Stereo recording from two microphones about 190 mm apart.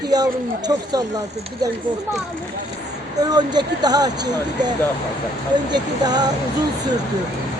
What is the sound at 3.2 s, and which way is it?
Speech, 20° right (ahead or behind).